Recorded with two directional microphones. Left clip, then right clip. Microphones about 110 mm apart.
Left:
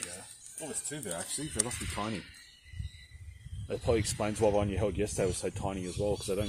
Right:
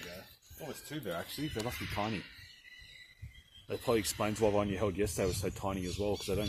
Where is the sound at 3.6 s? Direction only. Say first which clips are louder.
Left 2 dB; 45° right (ahead or behind).